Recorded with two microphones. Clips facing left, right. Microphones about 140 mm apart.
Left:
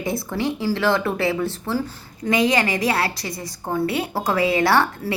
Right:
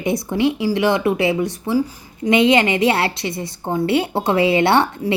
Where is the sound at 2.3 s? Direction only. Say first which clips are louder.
Right 5 dB; 25° right (ahead or behind).